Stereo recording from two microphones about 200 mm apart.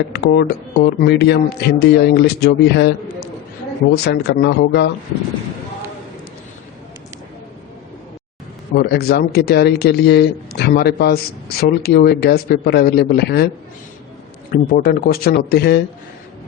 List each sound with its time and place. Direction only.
0.1 s speech: 55° left (ahead or behind)
3.9 s speech: 55° left (ahead or behind)
8.7 s a man's voice: 50° left (ahead or behind)
14.5 s a man's voice: 50° left (ahead or behind)